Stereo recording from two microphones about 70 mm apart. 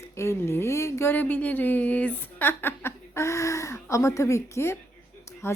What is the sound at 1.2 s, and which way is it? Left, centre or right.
A woman's voice, left.